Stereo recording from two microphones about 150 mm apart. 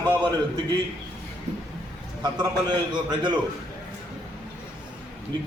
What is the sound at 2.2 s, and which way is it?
A man's voice, 30° right (ahead or behind).